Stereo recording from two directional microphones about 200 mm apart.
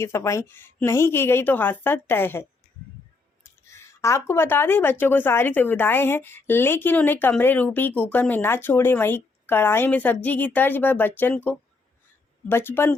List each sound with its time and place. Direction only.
0.0 s speech: 15° left (ahead or behind)
3.7 s speech: 15° left (ahead or behind)